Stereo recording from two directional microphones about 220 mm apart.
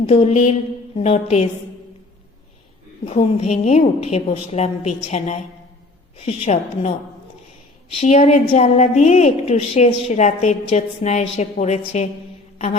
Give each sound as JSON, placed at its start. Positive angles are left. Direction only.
{"t": 0.1, "sound": "a woman's voice", "side_deg": 30}
{"t": 3.1, "sound": "a woman's voice", "side_deg": 25}
{"t": 7.9, "sound": "a woman's voice", "side_deg": 30}